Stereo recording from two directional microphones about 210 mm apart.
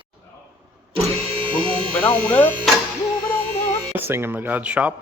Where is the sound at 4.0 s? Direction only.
10° right (ahead or behind).